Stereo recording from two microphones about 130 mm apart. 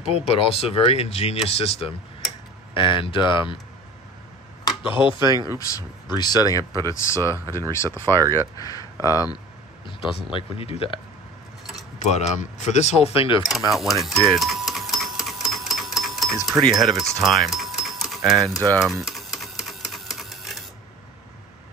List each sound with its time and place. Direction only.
0.1 s speech: 50° left (ahead or behind)
4.6 s speech: 40° left (ahead or behind)
5.6 s speech: 25° left (ahead or behind)
9.8 s speech: 45° left (ahead or behind)
12.0 s speech: 60° left (ahead or behind); by 13.4 s 45° left (ahead or behind)
13.7 s speech: centre (ahead or behind)
15.2 s a sound: centre (ahead or behind)
16.4 s speech: centre (ahead or behind)
18.8 s typewriter: centre (ahead or behind)